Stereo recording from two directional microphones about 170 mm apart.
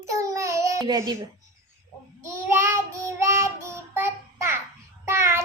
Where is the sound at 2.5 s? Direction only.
15° right (ahead or behind).